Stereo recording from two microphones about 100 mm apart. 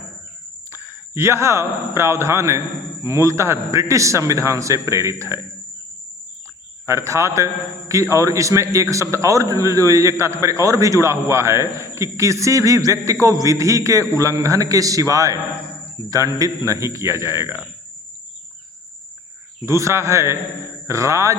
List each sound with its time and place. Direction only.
0.7 s a man's voice: 25° right (ahead or behind)
6.8 s a man's voice: 30° right (ahead or behind)
19.6 s a man's voice: 30° right (ahead or behind)